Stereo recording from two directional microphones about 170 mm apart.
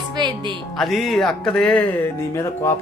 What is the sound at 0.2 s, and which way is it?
Music, 25° right (ahead or behind).